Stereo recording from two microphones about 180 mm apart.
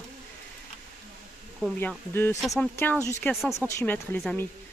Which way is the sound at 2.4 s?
Centre (ahead or behind).